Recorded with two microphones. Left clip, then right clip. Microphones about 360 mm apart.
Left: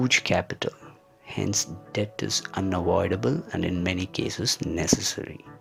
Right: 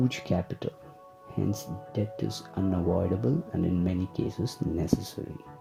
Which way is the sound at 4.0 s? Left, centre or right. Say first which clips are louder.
Left 3 dB; left.